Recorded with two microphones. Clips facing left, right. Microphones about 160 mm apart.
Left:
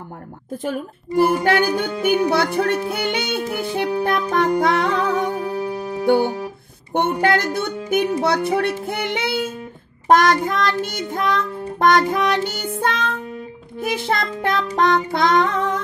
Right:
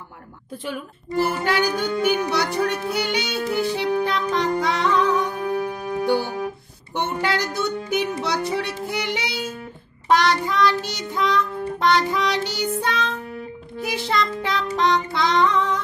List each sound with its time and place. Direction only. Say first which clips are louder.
0.5 s music: left 5 dB; 45° left (ahead or behind)
5.4 s music: left 1 dB; 30° left (ahead or behind)
6.0 s music: left 6 dB; 55° left (ahead or behind)